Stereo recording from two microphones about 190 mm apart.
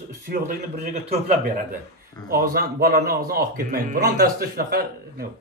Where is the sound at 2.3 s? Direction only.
50° right (ahead or behind).